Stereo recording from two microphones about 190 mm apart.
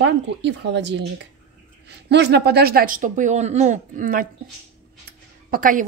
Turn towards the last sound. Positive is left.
turn(degrees=-45)  # may be behind; listen again after turning